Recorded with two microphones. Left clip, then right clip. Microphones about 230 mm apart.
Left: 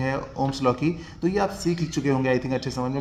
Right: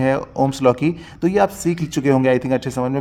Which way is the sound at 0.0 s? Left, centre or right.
Right.